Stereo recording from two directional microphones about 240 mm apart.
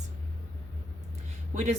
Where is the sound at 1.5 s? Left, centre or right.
Right.